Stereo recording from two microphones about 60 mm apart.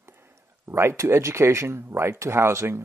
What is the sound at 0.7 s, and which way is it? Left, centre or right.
Speech, right.